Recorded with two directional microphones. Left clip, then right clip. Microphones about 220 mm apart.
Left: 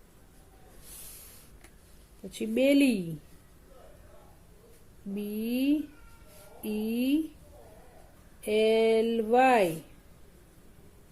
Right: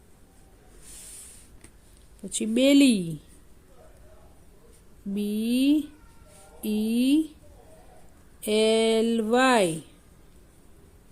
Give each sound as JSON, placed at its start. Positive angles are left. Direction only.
{"t": 2.3, "sound": "speech", "side_deg": -40}
{"t": 5.1, "sound": "speech", "side_deg": -40}
{"t": 8.4, "sound": "speech", "side_deg": -40}